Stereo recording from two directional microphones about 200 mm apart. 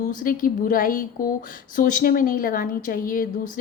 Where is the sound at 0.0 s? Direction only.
40° left (ahead or behind).